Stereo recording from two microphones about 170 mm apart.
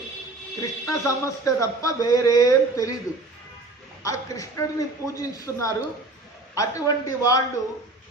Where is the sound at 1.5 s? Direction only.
20° left (ahead or behind).